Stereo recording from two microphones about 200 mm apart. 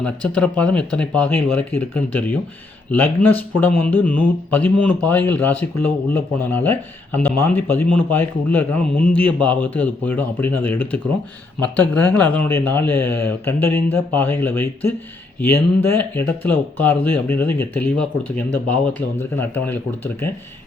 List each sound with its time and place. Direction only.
0.0 s speech: 5° left (ahead or behind)